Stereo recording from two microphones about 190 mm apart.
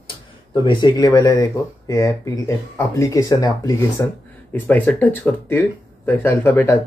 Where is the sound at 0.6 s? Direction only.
25° left (ahead or behind).